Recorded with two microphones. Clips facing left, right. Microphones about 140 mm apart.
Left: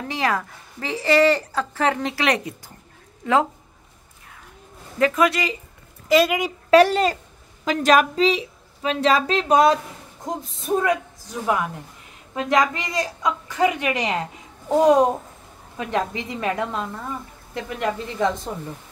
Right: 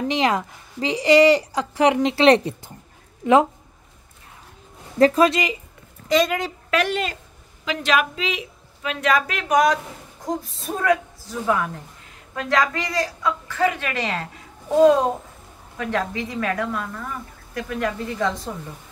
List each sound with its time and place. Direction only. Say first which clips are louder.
0.1 s a woman's voice: left 1 dB; 20° right (ahead or behind)
3.2 s speech: right 4 dB; 20° right (ahead or behind)
4.9 s speech: right 3 dB; 35° right (ahead or behind)
6.0 s speech: left 2 dB; 5° left (ahead or behind)
6.7 s a woman's voice: left 8 dB; 35° left (ahead or behind)